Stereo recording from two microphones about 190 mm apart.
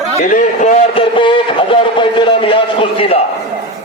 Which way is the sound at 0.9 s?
25° left (ahead or behind).